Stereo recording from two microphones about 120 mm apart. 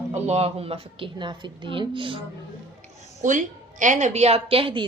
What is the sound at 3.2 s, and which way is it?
A woman's voice, 90° right.